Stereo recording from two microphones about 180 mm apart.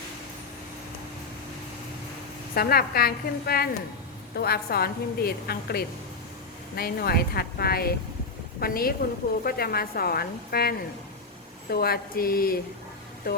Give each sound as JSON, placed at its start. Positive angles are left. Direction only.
{"t": 2.6, "sound": "a woman's voice", "side_deg": 55}